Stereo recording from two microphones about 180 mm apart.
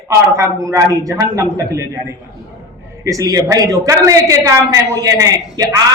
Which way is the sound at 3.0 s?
20° right (ahead or behind).